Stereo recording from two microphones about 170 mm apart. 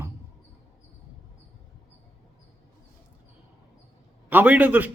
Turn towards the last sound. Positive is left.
turn(degrees=-10)  # may be behind; listen again after turning